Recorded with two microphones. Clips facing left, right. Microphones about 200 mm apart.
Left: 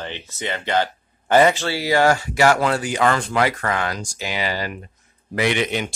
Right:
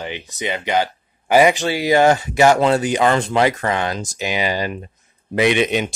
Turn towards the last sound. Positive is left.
turn(degrees=-20)  # may be behind; listen again after turning